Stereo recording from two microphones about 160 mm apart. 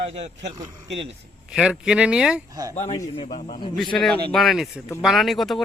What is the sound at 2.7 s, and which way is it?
A man's voice, 45° left (ahead or behind).